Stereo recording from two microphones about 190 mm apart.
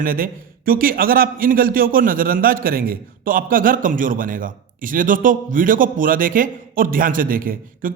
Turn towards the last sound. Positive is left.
turn(degrees=-45)  # may be behind; listen again after turning